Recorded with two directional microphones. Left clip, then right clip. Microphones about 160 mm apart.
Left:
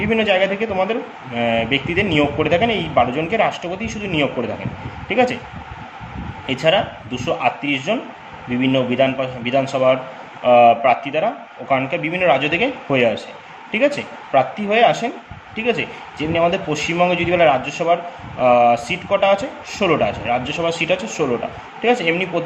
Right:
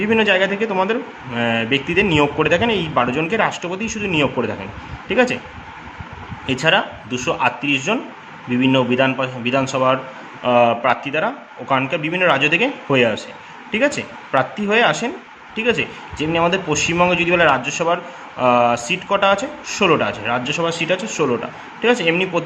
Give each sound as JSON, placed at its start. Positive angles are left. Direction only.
{"t": 0.1, "sound": "a man's voice", "side_deg": -35}
{"t": 6.4, "sound": "a man's voice", "side_deg": -35}